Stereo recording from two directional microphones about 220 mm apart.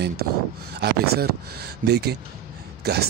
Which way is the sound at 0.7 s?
45° right (ahead or behind).